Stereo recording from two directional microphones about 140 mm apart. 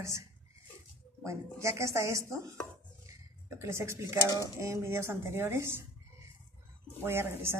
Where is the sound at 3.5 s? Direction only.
20° right (ahead or behind).